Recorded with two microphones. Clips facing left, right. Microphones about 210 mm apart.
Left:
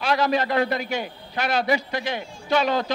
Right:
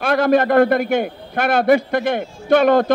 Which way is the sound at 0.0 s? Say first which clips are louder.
Right 7 dB; 55° right (ahead or behind).